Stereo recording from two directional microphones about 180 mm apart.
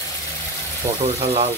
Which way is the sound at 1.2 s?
35° right (ahead or behind).